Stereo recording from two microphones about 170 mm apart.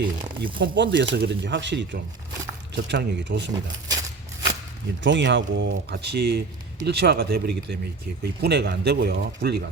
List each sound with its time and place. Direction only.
0.0 s speech: 25° right (ahead or behind)
0.6 s speech: 90° right
3.5 s speech: 20° right (ahead or behind)
5.0 s speech: 90° right; by 9.6 s 70° right (ahead or behind)